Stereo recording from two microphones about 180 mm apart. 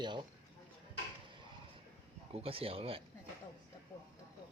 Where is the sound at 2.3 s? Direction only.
30° right (ahead or behind).